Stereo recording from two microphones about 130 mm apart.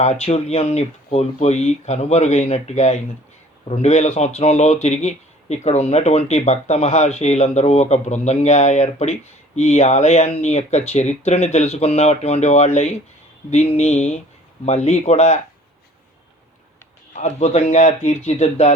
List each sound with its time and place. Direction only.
0.0 s speech: 55° left (ahead or behind)
17.2 s speech: 60° left (ahead or behind)